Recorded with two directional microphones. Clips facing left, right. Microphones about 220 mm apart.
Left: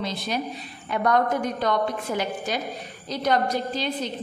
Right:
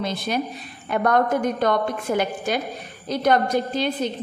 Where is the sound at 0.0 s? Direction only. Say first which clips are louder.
Right 3 dB; 50° right (ahead or behind).